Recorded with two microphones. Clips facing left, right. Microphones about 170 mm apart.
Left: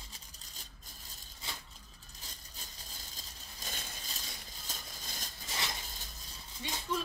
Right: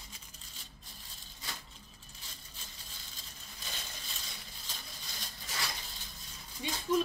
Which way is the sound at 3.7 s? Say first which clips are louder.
Left 1 dB; 45° left (ahead or behind).